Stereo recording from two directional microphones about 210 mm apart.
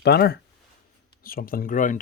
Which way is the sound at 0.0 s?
50° left (ahead or behind).